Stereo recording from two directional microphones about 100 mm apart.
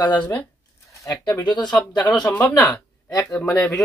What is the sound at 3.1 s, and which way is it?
Speech, 35° left (ahead or behind).